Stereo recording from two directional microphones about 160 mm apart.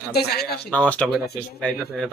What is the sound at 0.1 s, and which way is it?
Speech, 85° left.